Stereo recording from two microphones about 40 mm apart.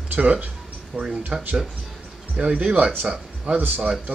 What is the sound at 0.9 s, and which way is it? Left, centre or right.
Speech, centre.